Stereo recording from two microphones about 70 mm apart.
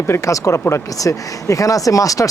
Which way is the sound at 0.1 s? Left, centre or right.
Left.